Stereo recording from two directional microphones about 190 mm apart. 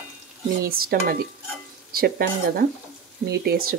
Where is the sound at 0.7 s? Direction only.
50° right (ahead or behind).